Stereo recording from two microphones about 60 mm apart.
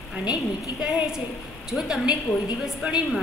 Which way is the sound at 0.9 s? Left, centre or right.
Centre.